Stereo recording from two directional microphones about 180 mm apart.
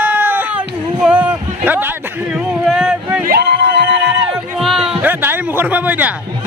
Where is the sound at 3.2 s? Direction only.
65° right (ahead or behind).